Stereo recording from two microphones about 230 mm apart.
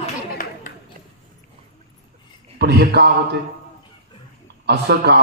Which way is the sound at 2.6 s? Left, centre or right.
Right.